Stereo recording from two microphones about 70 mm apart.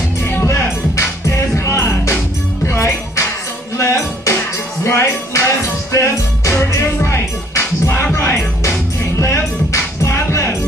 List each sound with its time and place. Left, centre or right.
0.5 s music: left